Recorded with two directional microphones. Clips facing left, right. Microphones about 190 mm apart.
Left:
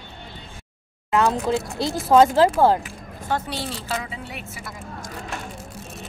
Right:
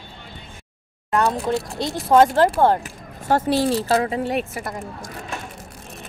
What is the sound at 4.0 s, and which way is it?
Speech, 55° right (ahead or behind).